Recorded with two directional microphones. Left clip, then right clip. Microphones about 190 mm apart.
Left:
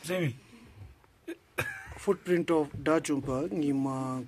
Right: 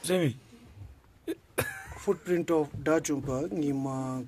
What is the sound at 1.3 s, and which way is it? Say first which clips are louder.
Cough: right 2 dB; 65° right (ahead or behind).